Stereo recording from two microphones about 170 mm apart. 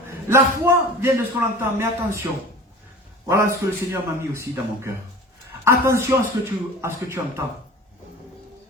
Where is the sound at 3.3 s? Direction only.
15° right (ahead or behind).